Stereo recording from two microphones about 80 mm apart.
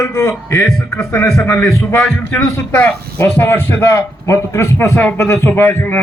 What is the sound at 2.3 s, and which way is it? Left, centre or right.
A man's voice, left.